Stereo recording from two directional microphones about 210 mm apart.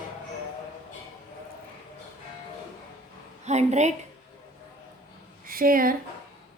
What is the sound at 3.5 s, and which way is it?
Speech, 35° right (ahead or behind).